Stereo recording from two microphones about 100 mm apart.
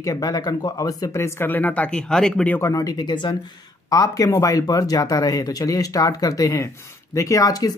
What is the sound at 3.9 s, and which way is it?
Speech, 35° left (ahead or behind).